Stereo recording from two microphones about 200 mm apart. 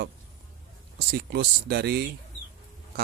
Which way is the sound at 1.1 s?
55° right (ahead or behind).